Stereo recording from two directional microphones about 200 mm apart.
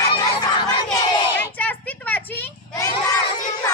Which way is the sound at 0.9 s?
20° left (ahead or behind).